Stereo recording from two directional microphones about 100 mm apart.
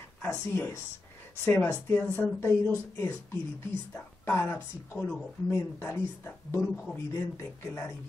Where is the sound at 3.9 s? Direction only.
25° left (ahead or behind).